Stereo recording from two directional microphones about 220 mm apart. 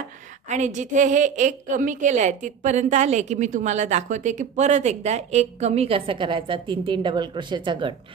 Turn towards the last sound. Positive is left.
turn(degrees=-20)  # may be behind; listen again after turning